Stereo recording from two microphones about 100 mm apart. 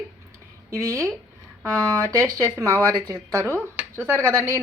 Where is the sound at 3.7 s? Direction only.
20° right (ahead or behind).